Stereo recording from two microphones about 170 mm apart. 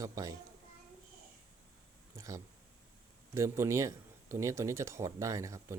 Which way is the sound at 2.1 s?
20° right (ahead or behind).